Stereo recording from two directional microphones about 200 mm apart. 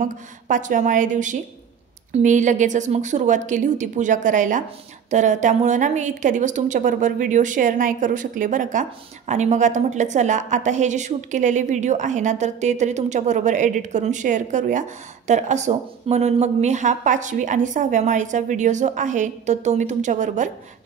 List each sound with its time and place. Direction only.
0.0 s a woman's voice: 40° right (ahead or behind)